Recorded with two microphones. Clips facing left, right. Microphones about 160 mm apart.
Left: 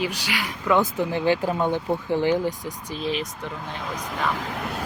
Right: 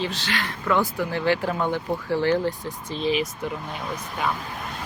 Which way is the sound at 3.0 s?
Centre (ahead or behind).